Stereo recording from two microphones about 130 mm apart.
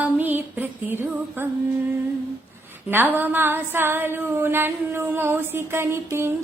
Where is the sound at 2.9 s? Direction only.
15° right (ahead or behind).